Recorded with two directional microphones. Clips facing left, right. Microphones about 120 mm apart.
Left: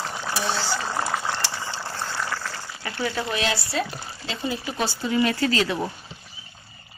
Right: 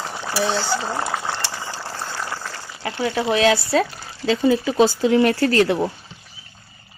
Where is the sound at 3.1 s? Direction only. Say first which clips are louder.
Right 7 dB; 90° right.